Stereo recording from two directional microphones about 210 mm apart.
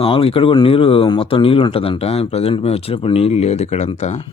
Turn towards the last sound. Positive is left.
turn(degrees=30)  # may be behind; listen again after turning